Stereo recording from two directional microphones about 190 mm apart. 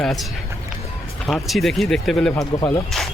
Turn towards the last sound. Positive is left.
turn(degrees=0)  # may be behind; listen again after turning